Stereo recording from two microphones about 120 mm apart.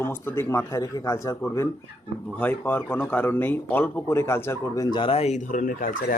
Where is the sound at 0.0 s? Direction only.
20° left (ahead or behind).